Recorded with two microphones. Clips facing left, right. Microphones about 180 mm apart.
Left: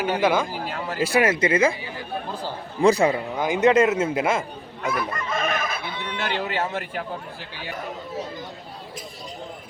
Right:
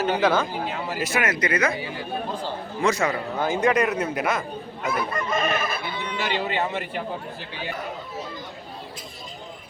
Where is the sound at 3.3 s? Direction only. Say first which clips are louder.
Left 2 dB; 15° left (ahead or behind).